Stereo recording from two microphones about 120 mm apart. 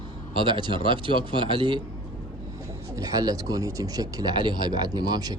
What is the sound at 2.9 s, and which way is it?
Speech, 30° right (ahead or behind).